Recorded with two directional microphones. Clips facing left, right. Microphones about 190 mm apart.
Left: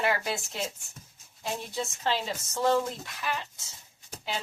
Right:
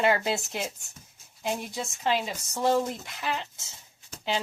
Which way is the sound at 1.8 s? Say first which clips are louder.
Even; 15° right (ahead or behind).